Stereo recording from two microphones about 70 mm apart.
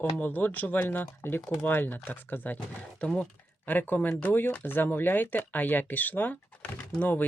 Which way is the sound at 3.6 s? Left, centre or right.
Left.